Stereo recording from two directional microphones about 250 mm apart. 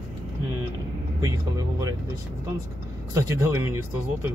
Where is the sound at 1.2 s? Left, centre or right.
Centre.